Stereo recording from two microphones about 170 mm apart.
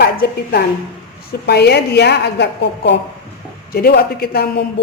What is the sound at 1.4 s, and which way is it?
A woman's voice, 75° left (ahead or behind).